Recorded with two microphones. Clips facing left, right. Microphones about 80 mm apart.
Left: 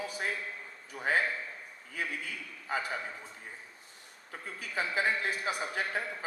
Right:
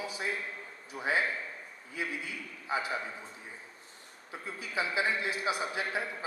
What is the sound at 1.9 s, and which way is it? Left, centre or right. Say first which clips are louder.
Speech: even; left.